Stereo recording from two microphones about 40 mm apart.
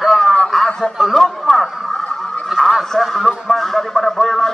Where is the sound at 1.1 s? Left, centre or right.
Centre.